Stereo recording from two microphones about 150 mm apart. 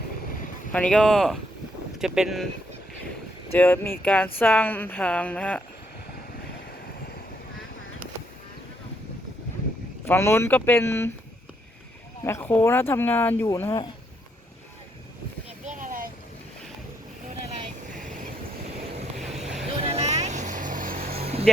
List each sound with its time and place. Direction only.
0.7 s speech: 5° left (ahead or behind)
3.5 s speech: 15° left (ahead or behind)
10.1 s speech: 15° left (ahead or behind)
12.2 s speech: 15° left (ahead or behind)
13.5 s speech: 20° left (ahead or behind)
15.6 s a sound: 60° right (ahead or behind)
19.8 s vehicle: 45° right (ahead or behind); by 21.2 s 70° right (ahead or behind)
21.2 s vehicle: 45° right (ahead or behind)